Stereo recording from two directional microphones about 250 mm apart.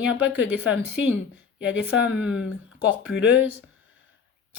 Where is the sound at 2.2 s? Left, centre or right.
Centre.